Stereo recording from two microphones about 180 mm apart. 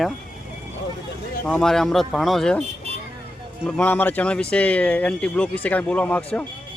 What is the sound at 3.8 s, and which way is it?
Speech, 10° left (ahead or behind).